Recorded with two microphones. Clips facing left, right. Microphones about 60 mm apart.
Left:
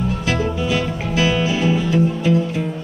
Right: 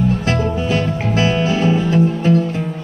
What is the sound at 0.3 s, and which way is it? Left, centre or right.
Music, right.